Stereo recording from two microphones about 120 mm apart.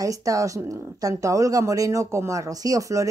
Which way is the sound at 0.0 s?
30° right (ahead or behind).